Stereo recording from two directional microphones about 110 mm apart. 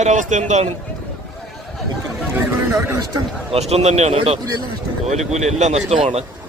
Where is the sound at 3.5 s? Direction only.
70° right (ahead or behind).